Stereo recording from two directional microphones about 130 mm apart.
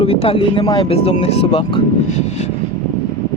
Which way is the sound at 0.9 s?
50° left (ahead or behind).